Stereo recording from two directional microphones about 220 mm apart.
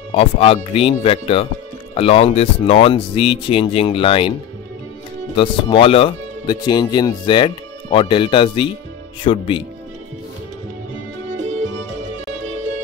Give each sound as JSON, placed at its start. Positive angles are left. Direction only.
{"t": 0.1, "sound": "speech", "side_deg": 25}
{"t": 5.3, "sound": "speech", "side_deg": 25}